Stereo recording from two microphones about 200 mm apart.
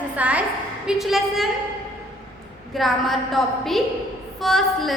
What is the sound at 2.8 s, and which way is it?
A woman's voice, centre (ahead or behind).